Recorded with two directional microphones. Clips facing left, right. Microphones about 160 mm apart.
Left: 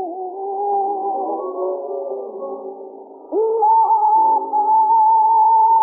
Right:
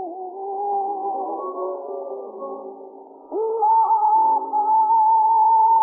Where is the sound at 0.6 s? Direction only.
20° left (ahead or behind).